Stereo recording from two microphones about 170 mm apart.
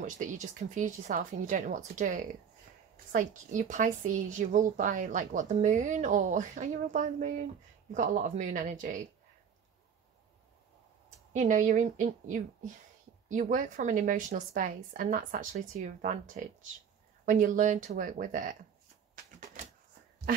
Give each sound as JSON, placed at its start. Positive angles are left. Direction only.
{"t": 0.0, "sound": "speech", "side_deg": -50}
{"t": 11.3, "sound": "speech", "side_deg": -50}